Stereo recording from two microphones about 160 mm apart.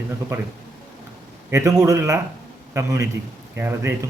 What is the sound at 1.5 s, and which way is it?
A man's voice, 20° right (ahead or behind).